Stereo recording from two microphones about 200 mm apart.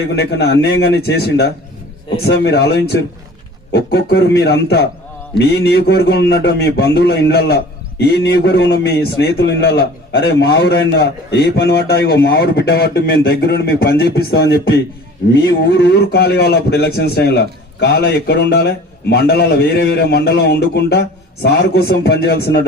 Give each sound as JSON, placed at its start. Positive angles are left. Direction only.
{"t": 0.2, "sound": "a man's voice", "side_deg": 55}